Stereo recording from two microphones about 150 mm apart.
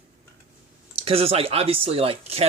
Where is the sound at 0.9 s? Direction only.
40° right (ahead or behind).